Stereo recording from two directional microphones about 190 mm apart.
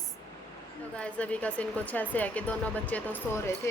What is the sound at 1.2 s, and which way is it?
A woman's voice, 5° left (ahead or behind).